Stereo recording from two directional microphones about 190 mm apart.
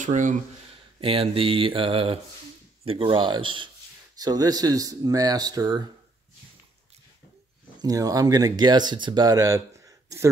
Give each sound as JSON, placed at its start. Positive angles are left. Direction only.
{"t": 0.0, "sound": "speech", "side_deg": -40}
{"t": 1.0, "sound": "speech", "side_deg": -30}
{"t": 7.8, "sound": "speech", "side_deg": -20}